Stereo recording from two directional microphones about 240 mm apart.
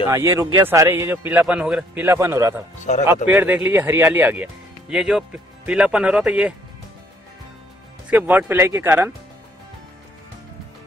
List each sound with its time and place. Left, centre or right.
0.0 s a man's voice: centre
2.8 s speech: left
3.3 s speech: centre
8.1 s a man's voice: centre